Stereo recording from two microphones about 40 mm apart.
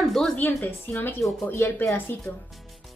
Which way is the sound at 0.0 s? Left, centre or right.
Centre.